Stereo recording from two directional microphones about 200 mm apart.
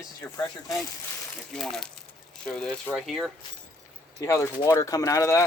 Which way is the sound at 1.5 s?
Centre (ahead or behind).